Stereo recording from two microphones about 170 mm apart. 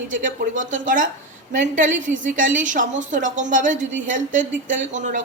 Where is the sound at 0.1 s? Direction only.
50° right (ahead or behind).